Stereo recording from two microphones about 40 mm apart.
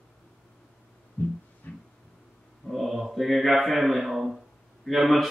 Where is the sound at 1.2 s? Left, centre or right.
Left.